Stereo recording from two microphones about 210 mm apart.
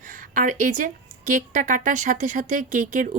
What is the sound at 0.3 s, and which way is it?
Speech, 40° right (ahead or behind).